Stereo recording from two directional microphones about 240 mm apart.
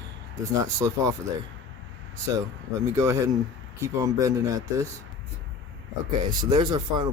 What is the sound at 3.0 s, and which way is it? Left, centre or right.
Speech, centre.